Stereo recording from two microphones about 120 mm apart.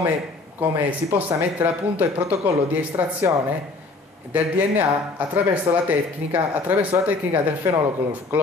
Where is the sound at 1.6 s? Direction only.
15° right (ahead or behind).